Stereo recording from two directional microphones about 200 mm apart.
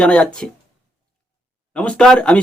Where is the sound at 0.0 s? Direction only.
5° left (ahead or behind).